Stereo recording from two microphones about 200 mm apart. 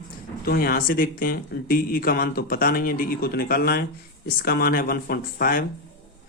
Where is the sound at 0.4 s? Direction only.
45° left (ahead or behind).